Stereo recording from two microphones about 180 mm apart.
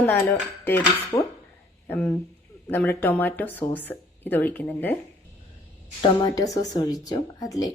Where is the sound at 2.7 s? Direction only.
10° left (ahead or behind).